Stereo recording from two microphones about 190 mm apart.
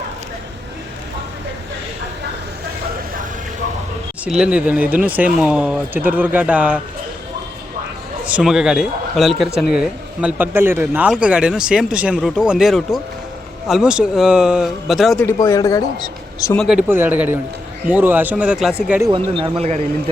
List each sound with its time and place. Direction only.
4.3 s speech: 5° right (ahead or behind)
8.2 s speech: 5° right (ahead or behind)
15.4 s speech: 15° left (ahead or behind)
16.6 s speech: 5° right (ahead or behind)
19.1 s speech: 30° right (ahead or behind)